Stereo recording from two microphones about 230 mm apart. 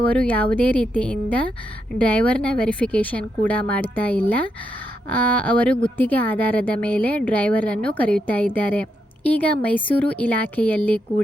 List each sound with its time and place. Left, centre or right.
0.1 s a woman's voice: centre